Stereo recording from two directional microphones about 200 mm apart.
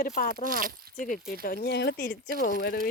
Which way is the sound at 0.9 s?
45° left (ahead or behind).